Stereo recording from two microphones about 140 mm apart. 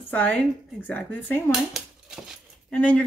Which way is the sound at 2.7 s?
10° left (ahead or behind).